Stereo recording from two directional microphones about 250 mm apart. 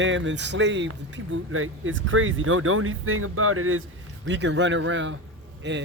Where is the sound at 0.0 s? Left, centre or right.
Right.